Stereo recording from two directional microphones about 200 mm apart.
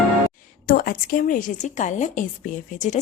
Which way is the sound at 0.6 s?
50° left (ahead or behind).